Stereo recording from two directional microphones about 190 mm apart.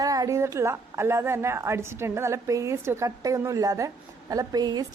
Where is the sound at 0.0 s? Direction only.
20° right (ahead or behind).